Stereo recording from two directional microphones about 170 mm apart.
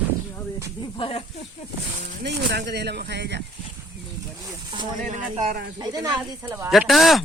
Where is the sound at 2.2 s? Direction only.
85° right.